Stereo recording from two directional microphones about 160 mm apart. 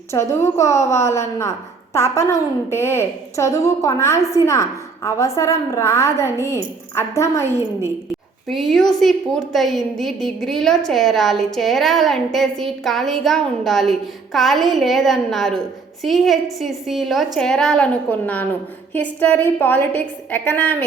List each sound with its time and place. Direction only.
0.1 s a woman's voice: 15° left (ahead or behind)
8.4 s a woman's voice: centre (ahead or behind)